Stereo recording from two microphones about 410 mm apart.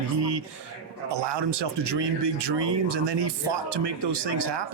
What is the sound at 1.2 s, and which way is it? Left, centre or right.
Speech, right.